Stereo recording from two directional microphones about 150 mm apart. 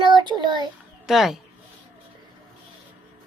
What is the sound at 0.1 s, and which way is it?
Child singing, 30° right (ahead or behind).